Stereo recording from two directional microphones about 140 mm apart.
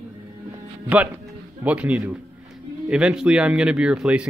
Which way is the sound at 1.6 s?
10° right (ahead or behind).